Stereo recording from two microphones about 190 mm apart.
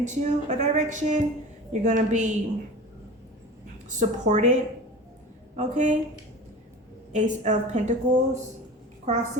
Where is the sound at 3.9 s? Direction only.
40° right (ahead or behind).